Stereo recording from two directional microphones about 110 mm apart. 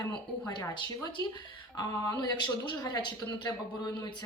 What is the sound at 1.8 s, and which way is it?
Speech, 35° left (ahead or behind).